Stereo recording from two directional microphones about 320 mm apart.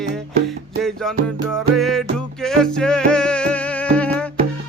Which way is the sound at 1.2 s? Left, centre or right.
Centre.